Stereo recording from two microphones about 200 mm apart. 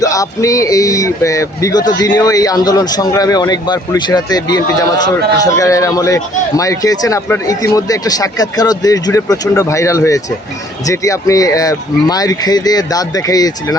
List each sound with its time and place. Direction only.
0.0 s a man's voice: 15° left (ahead or behind)